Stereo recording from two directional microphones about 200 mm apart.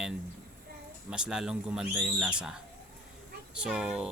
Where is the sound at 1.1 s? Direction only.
5° right (ahead or behind).